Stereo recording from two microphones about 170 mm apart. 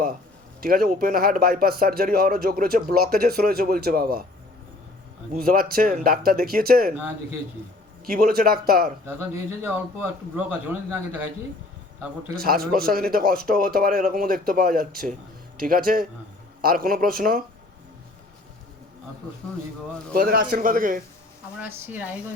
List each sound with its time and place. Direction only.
0.6 s speech: 60° right (ahead or behind)
5.4 s speech: 60° right (ahead or behind)
8.0 s speech: 60° right (ahead or behind)
9.0 s speech: 15° right (ahead or behind)
12.4 s speech: 60° right (ahead or behind)
20.1 s speech: 60° right (ahead or behind)
21.6 s speech: 10° right (ahead or behind)